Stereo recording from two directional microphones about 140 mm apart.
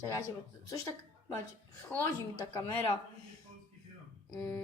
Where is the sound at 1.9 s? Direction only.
10° left (ahead or behind).